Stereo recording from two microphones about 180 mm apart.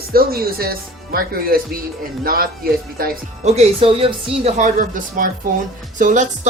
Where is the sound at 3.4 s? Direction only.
35° right (ahead or behind).